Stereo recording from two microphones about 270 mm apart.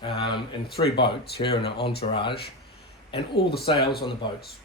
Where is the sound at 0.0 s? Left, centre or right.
Centre.